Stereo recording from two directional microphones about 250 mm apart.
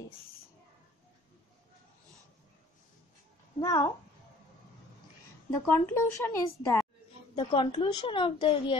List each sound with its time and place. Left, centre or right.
3.5 s speech: centre
5.7 s speech: centre
7.3 s a woman's voice: left